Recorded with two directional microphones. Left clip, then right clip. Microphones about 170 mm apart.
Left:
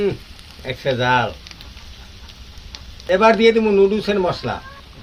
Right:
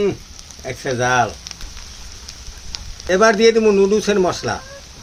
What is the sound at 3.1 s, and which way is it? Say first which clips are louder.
Speech: even; 90° right.